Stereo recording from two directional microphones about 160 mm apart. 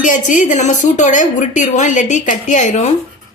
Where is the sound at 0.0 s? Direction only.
55° left (ahead or behind).